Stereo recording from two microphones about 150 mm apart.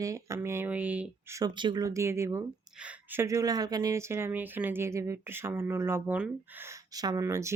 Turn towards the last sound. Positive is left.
turn(degrees=-20)  # may be behind; listen again after turning